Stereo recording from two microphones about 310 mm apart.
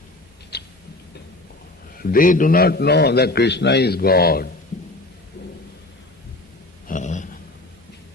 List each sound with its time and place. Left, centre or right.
0.5 s rodents: left
2.0 s a man's voice: left
6.8 s a sound: left